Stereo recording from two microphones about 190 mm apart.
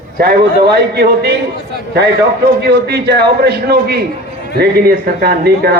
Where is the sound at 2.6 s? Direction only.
60° right (ahead or behind).